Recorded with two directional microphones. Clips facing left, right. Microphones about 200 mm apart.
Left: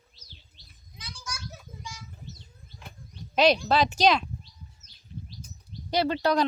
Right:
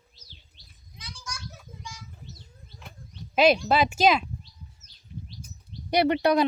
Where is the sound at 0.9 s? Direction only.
5° left (ahead or behind).